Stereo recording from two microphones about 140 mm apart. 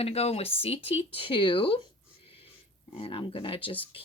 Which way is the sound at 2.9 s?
40° left (ahead or behind).